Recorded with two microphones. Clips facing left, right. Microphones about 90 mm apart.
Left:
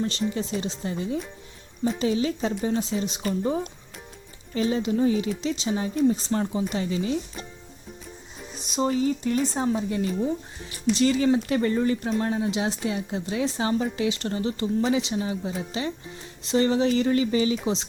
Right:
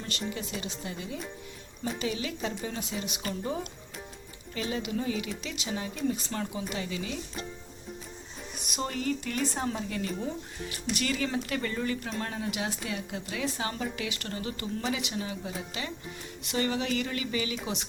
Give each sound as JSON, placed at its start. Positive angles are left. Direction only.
{"t": 0.0, "sound": "a woman's voice", "side_deg": 30}
{"t": 8.5, "sound": "speech", "side_deg": -5}
{"t": 8.8, "sound": "a woman's voice", "side_deg": 15}